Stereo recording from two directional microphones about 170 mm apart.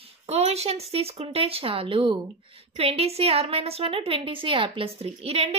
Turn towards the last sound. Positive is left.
turn(degrees=-35)  # may be behind; listen again after turning